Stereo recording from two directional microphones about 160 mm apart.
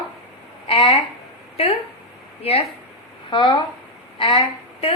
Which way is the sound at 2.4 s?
35° left (ahead or behind).